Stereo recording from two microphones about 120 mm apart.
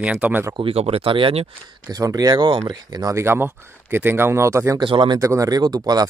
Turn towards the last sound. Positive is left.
turn(degrees=-35)  # may be behind; listen again after turning